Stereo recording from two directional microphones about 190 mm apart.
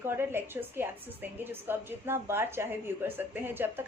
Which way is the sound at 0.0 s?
10° right (ahead or behind).